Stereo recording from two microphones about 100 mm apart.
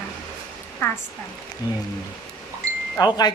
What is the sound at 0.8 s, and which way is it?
Hair dryer, 20° left (ahead or behind).